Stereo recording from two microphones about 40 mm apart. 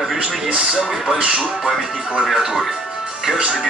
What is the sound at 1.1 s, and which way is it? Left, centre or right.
Speech, right.